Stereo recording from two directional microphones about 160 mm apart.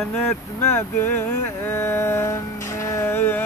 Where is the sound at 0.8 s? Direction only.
10° left (ahead or behind).